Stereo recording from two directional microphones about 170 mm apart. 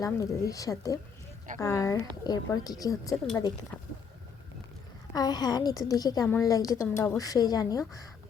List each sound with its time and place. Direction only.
0.0 s speech: 20° left (ahead or behind)
5.1 s speech: 25° left (ahead or behind)